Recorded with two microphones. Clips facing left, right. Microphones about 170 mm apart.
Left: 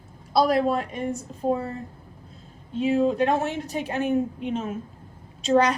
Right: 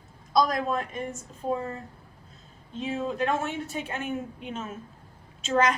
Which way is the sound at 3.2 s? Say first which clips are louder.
Left 4 dB; 35° left (ahead or behind).